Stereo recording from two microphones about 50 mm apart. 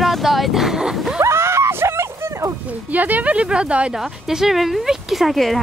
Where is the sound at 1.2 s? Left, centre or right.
Right.